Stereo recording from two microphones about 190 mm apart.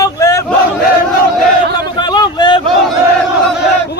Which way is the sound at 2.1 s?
25° left (ahead or behind).